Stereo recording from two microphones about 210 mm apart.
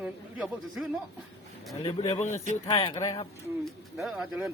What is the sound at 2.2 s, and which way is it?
Speech, 35° left (ahead or behind).